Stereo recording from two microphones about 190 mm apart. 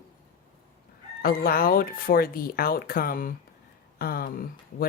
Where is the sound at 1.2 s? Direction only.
50° left (ahead or behind).